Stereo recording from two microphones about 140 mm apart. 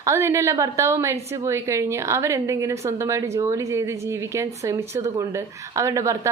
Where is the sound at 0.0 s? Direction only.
20° right (ahead or behind).